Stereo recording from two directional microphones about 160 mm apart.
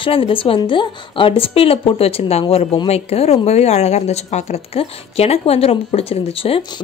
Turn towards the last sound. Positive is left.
turn(degrees=35)  # may be behind; listen again after turning